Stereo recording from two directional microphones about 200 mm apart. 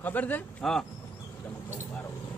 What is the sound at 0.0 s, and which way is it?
Speech, 10° left (ahead or behind).